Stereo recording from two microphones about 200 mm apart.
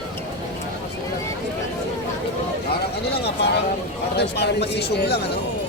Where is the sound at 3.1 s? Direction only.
55° left (ahead or behind).